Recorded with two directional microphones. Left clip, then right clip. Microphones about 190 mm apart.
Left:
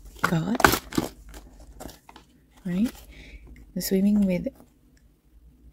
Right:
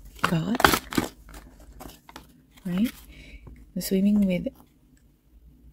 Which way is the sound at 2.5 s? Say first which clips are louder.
Even; 5° left (ahead or behind).